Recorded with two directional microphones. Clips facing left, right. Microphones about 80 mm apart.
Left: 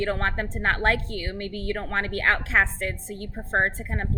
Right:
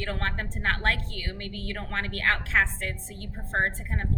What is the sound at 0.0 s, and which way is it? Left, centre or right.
A woman's voice, centre.